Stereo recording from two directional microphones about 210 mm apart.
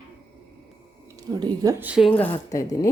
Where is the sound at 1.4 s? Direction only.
20° right (ahead or behind).